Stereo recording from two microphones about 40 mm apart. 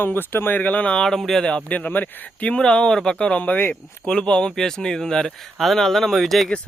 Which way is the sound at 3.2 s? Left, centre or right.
Left.